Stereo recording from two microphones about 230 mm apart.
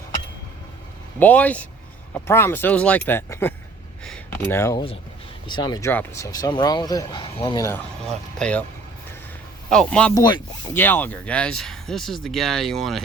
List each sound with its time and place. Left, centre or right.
1.2 s speech: centre
4.0 s a sound: centre
5.5 s speech: centre
9.6 s speech: centre